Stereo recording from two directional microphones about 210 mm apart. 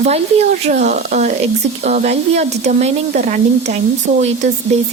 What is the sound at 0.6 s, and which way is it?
Speech, 35° right (ahead or behind).